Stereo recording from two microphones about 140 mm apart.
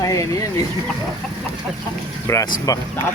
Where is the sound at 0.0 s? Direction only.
25° left (ahead or behind).